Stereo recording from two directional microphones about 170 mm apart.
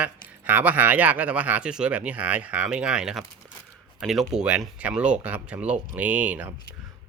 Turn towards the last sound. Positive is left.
turn(degrees=-10)  # may be behind; listen again after turning